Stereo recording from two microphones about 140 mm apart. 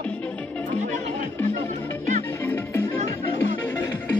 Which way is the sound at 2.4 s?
15° left (ahead or behind).